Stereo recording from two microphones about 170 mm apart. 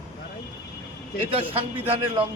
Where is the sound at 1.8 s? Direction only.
35° right (ahead or behind).